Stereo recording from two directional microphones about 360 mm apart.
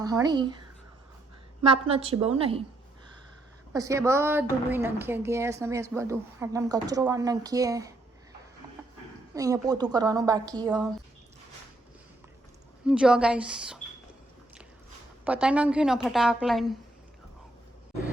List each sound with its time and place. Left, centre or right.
0.0 s a woman's voice: centre
1.6 s a woman's voice: centre
3.7 s a woman's voice: centre
9.3 s a woman's voice: centre
12.8 s a woman's voice: centre
15.2 s a woman's voice: centre